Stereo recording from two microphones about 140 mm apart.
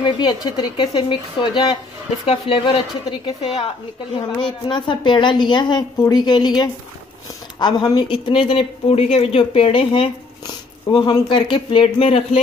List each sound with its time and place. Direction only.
0.0 s speech: 30° left (ahead or behind)